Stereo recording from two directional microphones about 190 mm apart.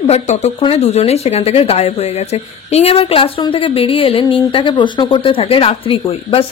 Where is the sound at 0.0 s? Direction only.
35° left (ahead or behind).